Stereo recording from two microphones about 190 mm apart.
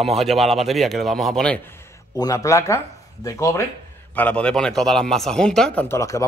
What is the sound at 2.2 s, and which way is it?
Speech, 15° left (ahead or behind).